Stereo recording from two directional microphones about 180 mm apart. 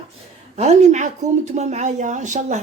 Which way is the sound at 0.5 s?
40° right (ahead or behind).